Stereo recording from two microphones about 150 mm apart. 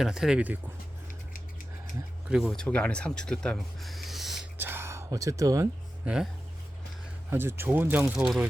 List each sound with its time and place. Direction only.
0.0 s speech: 5° right (ahead or behind)
2.3 s speech: centre (ahead or behind)
4.5 s a sound: 15° right (ahead or behind)
7.3 s speech: 15° right (ahead or behind)